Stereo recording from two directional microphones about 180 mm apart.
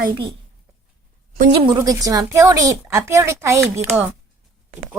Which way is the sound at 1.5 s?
30° right (ahead or behind).